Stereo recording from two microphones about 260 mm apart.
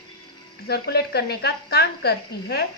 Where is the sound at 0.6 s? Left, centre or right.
Left.